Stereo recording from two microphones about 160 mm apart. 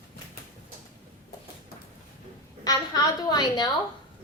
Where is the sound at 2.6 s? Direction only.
25° left (ahead or behind).